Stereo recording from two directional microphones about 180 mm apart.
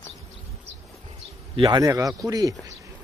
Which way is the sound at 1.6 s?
20° right (ahead or behind).